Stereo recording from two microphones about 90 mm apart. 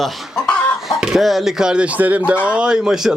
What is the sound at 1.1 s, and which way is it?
Speech, centre (ahead or behind).